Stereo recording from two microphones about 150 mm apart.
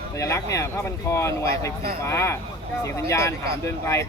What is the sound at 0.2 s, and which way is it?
Speech, 20° left (ahead or behind).